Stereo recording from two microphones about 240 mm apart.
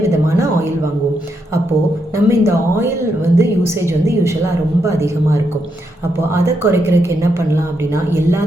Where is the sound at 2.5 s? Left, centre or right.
Centre.